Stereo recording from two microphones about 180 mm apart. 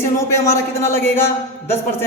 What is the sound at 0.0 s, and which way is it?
A man's voice, 15° left (ahead or behind).